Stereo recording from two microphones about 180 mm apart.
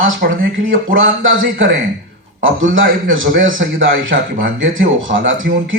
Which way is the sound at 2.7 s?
90° right.